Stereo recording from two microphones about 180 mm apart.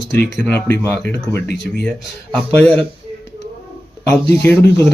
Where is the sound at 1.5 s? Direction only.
65° left (ahead or behind).